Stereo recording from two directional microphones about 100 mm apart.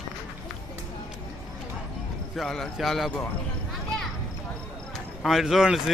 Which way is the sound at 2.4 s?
5° left (ahead or behind).